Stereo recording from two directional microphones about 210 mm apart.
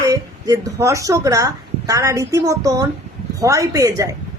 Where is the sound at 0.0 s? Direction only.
15° right (ahead or behind).